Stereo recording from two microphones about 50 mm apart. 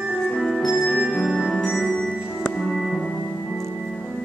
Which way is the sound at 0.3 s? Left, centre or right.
Centre.